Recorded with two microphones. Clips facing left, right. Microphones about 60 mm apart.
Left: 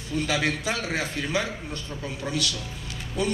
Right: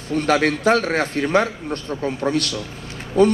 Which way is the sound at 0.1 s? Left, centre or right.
Right.